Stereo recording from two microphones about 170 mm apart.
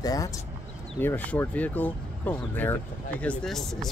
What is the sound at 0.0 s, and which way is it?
Speech, 20° left (ahead or behind).